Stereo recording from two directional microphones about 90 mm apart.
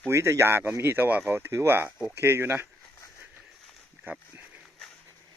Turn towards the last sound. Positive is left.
turn(degrees=-20)  # may be behind; listen again after turning